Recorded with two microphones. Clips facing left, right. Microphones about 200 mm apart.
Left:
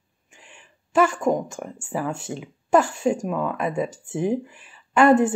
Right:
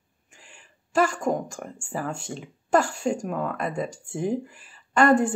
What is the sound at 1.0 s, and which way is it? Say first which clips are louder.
Speech: left 3 dB; centre (ahead or behind).